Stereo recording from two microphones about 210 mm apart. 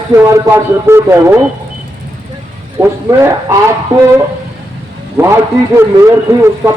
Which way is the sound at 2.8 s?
15° right (ahead or behind).